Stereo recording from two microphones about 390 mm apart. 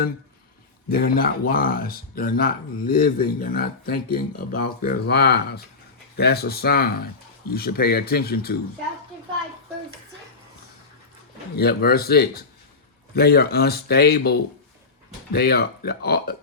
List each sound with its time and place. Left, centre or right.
0.9 s speech: left
11.5 s speech: left